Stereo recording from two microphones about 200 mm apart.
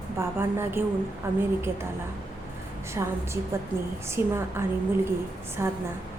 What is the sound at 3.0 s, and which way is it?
A woman's voice, 15° right (ahead or behind).